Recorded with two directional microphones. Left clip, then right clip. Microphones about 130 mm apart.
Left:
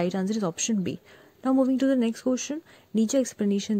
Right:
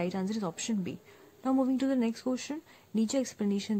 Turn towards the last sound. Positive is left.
turn(degrees=30)  # may be behind; listen again after turning